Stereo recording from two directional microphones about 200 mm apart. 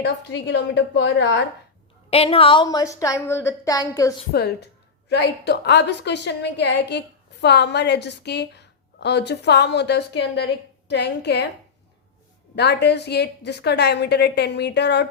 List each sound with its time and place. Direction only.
0.0 s a woman's voice: 60° left (ahead or behind)
2.0 s a woman's voice: 30° left (ahead or behind)
4.3 s a woman's voice: 50° left (ahead or behind)
12.5 s a woman's voice: 55° left (ahead or behind)